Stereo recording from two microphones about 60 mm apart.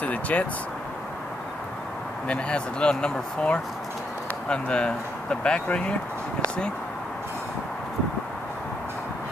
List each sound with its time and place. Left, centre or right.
0.0 s speech: left
2.2 s speech: centre